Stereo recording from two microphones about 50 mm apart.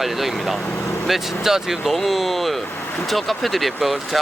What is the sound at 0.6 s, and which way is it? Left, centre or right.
Speech, left.